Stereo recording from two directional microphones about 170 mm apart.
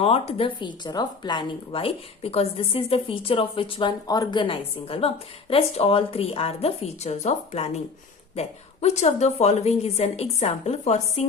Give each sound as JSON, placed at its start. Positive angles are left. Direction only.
{"t": 0.0, "sound": "speech", "side_deg": 35}